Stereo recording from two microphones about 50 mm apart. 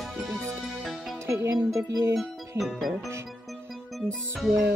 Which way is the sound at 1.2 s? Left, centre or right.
Right.